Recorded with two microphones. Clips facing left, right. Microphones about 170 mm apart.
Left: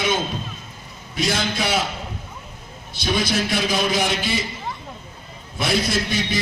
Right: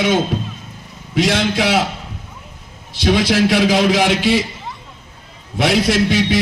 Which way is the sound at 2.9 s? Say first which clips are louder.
Right 7 dB; 90° right.